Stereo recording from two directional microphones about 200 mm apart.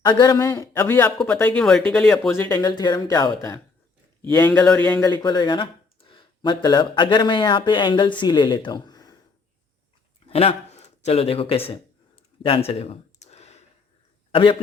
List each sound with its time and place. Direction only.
0.0 s speech: 20° left (ahead or behind)
5.0 s speech: 20° left (ahead or behind)
10.2 s a sound: 30° left (ahead or behind)
14.3 s a man's voice: 25° left (ahead or behind)